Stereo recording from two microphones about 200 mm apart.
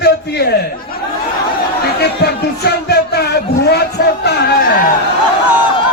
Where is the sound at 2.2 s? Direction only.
55° left (ahead or behind).